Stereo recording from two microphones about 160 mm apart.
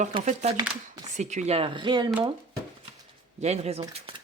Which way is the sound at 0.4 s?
45° right (ahead or behind).